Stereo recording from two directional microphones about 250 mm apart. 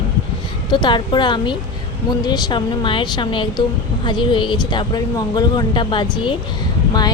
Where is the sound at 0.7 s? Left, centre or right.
Centre.